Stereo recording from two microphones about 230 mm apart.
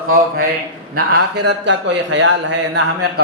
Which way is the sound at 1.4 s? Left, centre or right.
Right.